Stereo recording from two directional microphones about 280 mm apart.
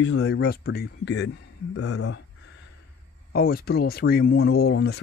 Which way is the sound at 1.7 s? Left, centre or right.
Left.